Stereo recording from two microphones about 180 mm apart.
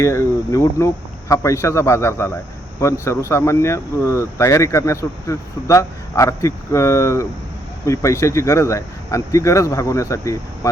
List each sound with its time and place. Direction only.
0.0 s speech: 15° left (ahead or behind)